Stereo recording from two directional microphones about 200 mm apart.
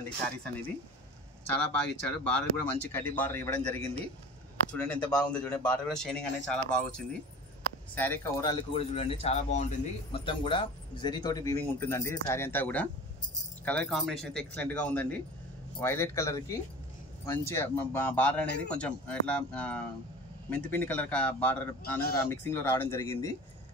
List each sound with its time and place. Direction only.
1.7 s speech: 5° left (ahead or behind); by 9.7 s 35° left (ahead or behind)
10.1 s speech: 25° left (ahead or behind)